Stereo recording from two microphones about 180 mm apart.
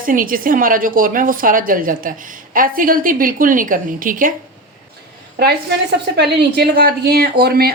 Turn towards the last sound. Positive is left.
turn(degrees=-60)  # may be behind; listen again after turning